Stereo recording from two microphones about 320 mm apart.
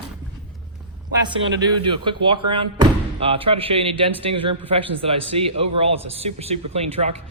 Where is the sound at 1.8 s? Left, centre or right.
Centre.